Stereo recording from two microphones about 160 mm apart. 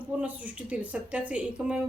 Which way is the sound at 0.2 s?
10° right (ahead or behind).